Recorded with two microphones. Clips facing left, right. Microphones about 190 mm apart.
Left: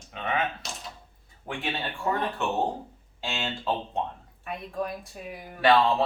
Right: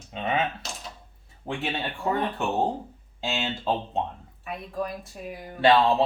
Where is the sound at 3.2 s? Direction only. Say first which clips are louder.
Right 3 dB; 20° right (ahead or behind).